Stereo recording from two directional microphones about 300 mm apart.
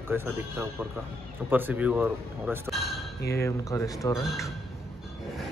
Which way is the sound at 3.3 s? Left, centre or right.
Centre.